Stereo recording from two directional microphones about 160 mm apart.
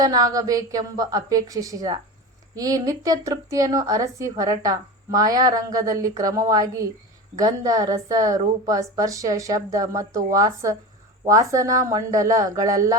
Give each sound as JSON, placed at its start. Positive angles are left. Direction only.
{"t": 0.0, "sound": "a woman's voice", "side_deg": -25}